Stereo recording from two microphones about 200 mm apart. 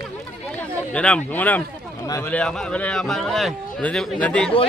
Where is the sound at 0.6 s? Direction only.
5° left (ahead or behind).